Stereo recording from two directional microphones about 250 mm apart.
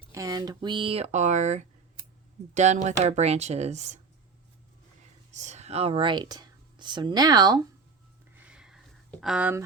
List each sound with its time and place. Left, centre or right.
0.1 s speech: centre
5.3 s speech: right
8.4 s a sound: centre